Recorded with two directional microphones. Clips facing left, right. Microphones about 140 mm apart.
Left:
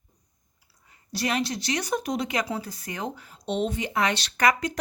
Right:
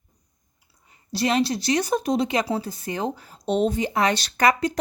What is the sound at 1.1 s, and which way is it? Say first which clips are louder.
A woman's voice: right 5 dB; 30° right (ahead or behind).